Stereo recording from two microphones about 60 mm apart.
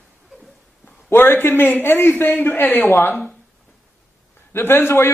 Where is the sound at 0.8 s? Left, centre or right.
Left.